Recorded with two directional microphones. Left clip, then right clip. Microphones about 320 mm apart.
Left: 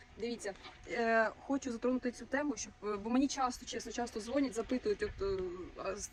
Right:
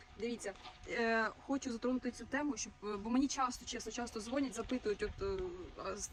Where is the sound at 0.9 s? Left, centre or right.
Centre.